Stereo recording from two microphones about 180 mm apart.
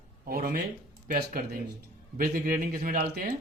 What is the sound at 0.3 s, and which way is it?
Speech, 50° right (ahead or behind).